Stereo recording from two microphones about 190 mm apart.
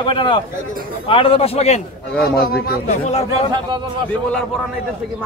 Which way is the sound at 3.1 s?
35° left (ahead or behind).